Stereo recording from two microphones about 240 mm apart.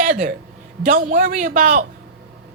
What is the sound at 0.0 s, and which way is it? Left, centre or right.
A woman's voice, right.